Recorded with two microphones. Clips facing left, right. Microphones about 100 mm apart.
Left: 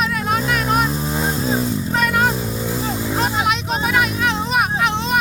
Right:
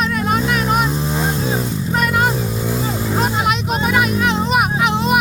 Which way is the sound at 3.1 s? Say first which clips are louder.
Right 2 dB; centre (ahead or behind).